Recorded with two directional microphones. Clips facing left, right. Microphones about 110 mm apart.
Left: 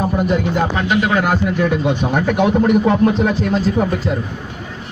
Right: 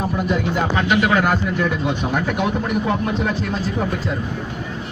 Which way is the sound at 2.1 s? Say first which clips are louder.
Left 6 dB; 45° left (ahead or behind).